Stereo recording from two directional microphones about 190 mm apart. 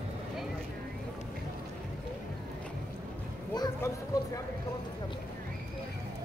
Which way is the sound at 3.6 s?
20° left (ahead or behind).